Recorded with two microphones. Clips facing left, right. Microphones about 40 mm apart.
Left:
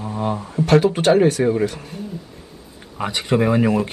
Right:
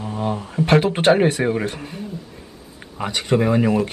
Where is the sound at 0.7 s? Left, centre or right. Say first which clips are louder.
Left 1 dB; right.